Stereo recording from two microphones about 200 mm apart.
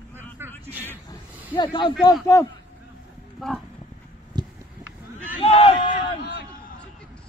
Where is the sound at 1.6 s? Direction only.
25° left (ahead or behind).